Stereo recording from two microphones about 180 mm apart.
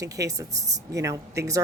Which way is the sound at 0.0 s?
20° right (ahead or behind).